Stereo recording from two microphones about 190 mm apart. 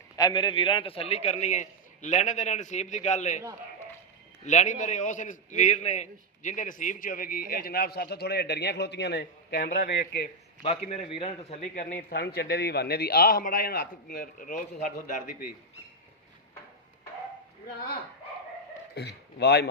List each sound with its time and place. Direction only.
0.2 s a man's voice: 20° left (ahead or behind); by 3.4 s 40° left (ahead or behind)
4.4 s a man's voice: 40° left (ahead or behind); by 10.2 s 55° left (ahead or behind)
10.6 s a man's voice: 35° left (ahead or behind)
12.0 s a man's voice: 60° left (ahead or behind)
18.9 s a man's voice: 60° left (ahead or behind)